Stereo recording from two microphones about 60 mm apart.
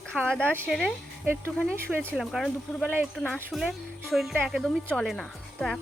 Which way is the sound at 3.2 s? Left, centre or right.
Left.